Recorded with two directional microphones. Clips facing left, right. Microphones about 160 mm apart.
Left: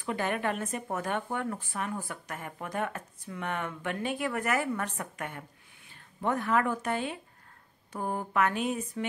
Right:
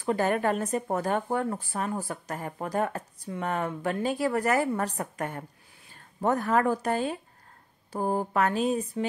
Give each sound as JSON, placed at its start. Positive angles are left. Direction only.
{"t": 0.0, "sound": "speech", "side_deg": -40}